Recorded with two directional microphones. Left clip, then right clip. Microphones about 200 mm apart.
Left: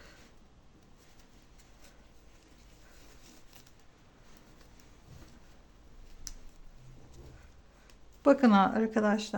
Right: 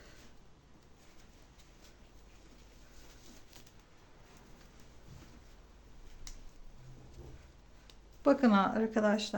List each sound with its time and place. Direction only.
8.2 s speech: 20° left (ahead or behind)